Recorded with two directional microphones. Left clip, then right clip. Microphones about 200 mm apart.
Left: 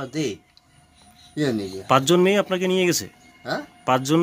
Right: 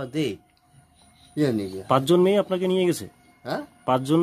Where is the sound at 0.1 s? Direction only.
40° right (ahead or behind).